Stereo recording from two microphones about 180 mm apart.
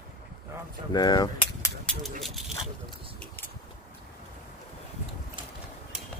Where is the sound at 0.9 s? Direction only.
25° left (ahead or behind).